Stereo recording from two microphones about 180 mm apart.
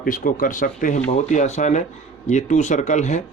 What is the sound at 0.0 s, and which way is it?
Speech, 50° left (ahead or behind).